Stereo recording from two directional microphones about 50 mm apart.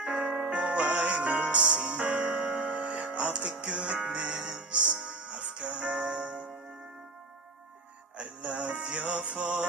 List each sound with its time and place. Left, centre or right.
0.0 s music: centre
4.4 s music: centre
4.7 s music: right
8.2 s music: right